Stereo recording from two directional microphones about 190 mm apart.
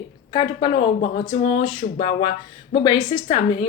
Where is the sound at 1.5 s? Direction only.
40° left (ahead or behind).